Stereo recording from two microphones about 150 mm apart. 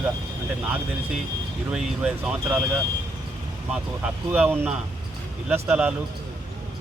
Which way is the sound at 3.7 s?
5° right (ahead or behind).